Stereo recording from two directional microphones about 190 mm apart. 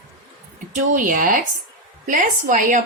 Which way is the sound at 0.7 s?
45° right (ahead or behind).